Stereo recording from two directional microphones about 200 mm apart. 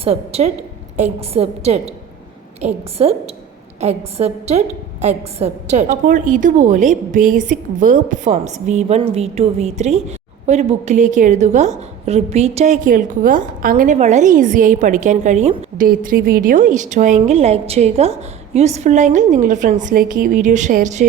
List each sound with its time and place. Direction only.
0.0 s a woman's voice: 30° right (ahead or behind)